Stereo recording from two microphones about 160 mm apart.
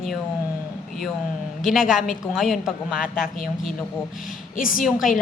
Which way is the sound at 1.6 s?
5° right (ahead or behind).